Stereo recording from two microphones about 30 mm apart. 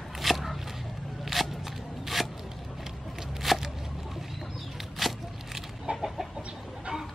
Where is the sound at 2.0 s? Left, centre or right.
Centre.